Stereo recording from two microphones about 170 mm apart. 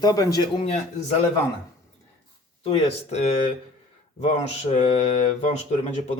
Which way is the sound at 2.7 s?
40° left (ahead or behind).